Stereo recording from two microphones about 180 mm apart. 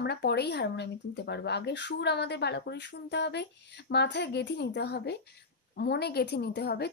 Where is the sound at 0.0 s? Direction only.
65° left (ahead or behind).